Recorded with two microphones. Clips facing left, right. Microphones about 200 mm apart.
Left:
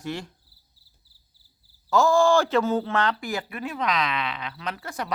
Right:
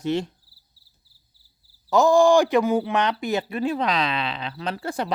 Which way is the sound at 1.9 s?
15° right (ahead or behind).